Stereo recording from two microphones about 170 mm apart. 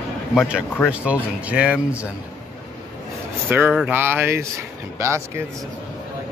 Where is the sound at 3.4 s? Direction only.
10° right (ahead or behind).